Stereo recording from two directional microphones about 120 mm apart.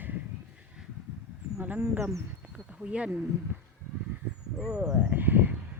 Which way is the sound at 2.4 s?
5° right (ahead or behind).